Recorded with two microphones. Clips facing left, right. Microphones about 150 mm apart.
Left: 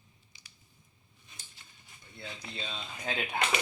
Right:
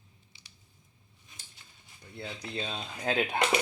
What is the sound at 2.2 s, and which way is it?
Speech, 40° right (ahead or behind).